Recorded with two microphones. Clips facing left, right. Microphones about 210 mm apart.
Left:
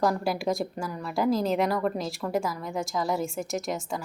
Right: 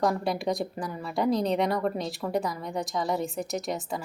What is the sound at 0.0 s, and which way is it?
A woman's voice, centre (ahead or behind).